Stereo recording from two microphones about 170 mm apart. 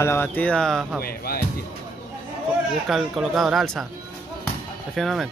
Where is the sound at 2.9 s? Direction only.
Centre (ahead or behind).